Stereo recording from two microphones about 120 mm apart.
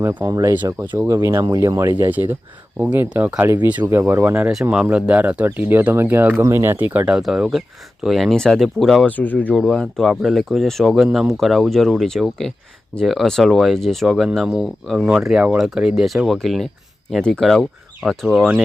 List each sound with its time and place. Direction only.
0.0 s speech: 15° right (ahead or behind)
0.3 s speech: 30° right (ahead or behind); by 9.0 s centre (ahead or behind)
9.0 s speech: 15° left (ahead or behind)
9.6 s speech: 5° left (ahead or behind)